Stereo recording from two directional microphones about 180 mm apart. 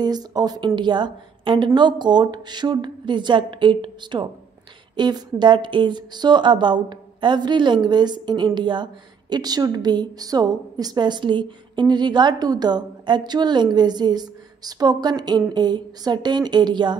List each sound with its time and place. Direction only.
0.0 s speech: 20° right (ahead or behind)